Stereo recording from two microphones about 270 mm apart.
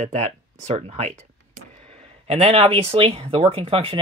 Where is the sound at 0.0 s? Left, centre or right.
Right.